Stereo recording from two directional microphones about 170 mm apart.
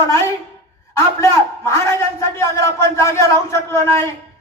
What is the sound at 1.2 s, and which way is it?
Speech, 15° left (ahead or behind).